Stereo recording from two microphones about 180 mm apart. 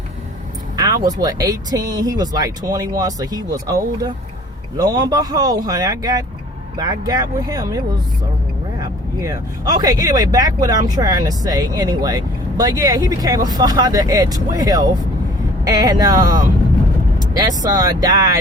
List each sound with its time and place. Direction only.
0.8 s speech: 20° right (ahead or behind)